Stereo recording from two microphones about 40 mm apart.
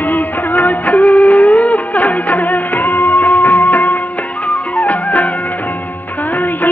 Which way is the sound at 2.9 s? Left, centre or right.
Left.